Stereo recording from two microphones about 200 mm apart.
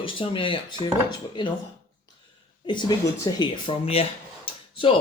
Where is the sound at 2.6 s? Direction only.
20° left (ahead or behind).